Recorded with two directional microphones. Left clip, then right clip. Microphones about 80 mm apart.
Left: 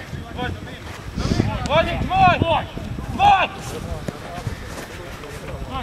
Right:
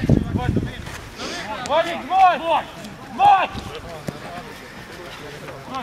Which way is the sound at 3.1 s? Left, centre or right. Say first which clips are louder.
Right 1 dB; left.